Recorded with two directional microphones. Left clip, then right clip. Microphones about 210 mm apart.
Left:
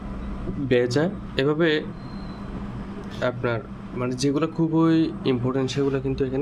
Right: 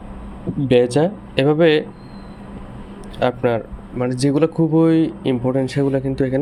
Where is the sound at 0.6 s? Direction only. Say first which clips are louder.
Right 6 dB; 20° right (ahead or behind).